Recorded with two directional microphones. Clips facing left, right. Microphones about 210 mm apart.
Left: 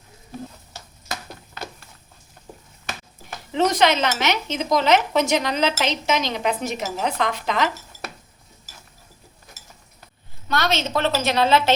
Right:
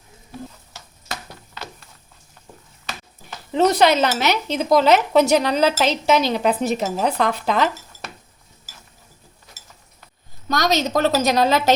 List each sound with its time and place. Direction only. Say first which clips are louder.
3.5 s speech: right 3 dB; 40° right (ahead or behind)
10.5 s speech: right 3 dB; 40° right (ahead or behind)